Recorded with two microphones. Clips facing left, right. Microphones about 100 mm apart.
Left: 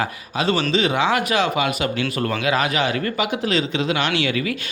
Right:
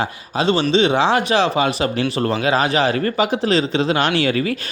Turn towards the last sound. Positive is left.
turn(degrees=-40)  # may be behind; listen again after turning